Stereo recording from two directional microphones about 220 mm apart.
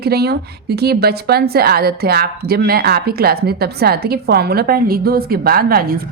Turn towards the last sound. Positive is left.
turn(degrees=-45)  # may be behind; listen again after turning